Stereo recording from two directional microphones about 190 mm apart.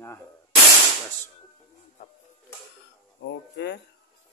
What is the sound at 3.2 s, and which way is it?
Speech, 65° left (ahead or behind).